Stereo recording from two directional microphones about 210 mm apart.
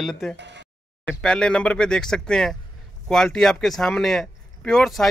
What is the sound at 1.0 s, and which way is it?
Speech, 5° left (ahead or behind).